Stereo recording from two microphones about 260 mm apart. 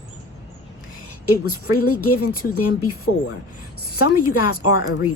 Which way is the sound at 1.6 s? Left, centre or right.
Left.